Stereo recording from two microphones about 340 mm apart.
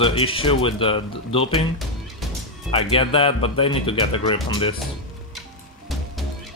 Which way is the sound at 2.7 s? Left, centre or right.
Centre.